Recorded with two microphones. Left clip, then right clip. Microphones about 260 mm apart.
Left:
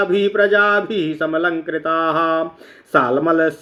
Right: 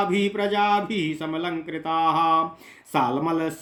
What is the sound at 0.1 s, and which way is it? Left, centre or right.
Speech, right.